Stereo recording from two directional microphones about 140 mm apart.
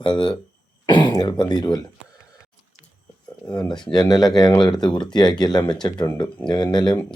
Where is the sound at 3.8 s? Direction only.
30° left (ahead or behind).